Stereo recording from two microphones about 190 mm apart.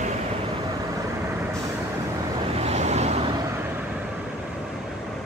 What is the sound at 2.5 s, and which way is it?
Vehicle, 35° right (ahead or behind).